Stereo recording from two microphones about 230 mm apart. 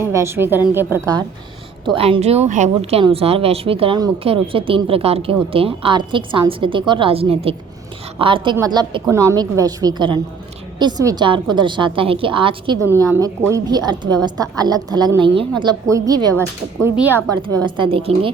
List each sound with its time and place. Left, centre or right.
0.0 s a woman's voice: centre
2.0 s a woman's voice: right; by 17.2 s centre
17.6 s a woman's voice: right